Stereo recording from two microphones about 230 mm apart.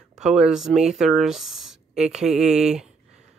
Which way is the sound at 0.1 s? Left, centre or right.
Centre.